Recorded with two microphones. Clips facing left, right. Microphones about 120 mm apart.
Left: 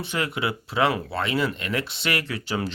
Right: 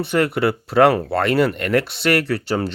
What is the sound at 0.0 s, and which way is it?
Speech, 65° right (ahead or behind).